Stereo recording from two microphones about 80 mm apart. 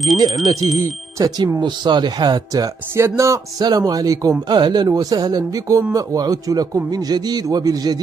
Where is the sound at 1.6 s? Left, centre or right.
Right.